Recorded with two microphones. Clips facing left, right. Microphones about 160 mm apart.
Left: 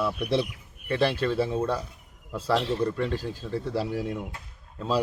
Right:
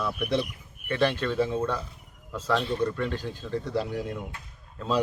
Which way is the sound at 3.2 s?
35° left (ahead or behind).